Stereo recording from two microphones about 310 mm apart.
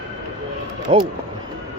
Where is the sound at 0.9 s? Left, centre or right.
Centre.